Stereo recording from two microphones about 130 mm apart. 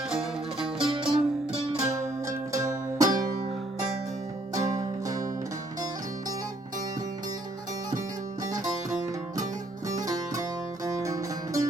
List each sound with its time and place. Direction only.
0.6 s music: 40° right (ahead or behind)
1.9 s music: 25° right (ahead or behind)
4.5 s music: 30° right (ahead or behind)
10.8 s music: 25° right (ahead or behind)